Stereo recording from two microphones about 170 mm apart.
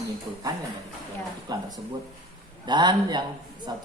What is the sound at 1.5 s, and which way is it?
Speech, 20° right (ahead or behind).